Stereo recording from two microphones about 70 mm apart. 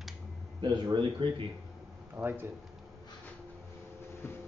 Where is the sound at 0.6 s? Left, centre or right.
Right.